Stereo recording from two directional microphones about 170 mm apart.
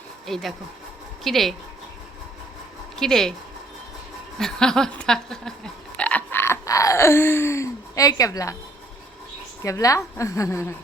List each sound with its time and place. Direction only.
0.3 s speech: centre (ahead or behind)
2.9 s speech: centre (ahead or behind)
4.4 s frog: 5° left (ahead or behind); by 8.5 s 20° left (ahead or behind)
9.6 s a woman's voice: 20° left (ahead or behind)